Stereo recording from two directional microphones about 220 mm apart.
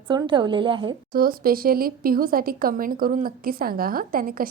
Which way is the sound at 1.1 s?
40° right (ahead or behind).